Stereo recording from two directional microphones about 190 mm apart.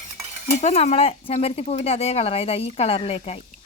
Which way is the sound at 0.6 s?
35° left (ahead or behind).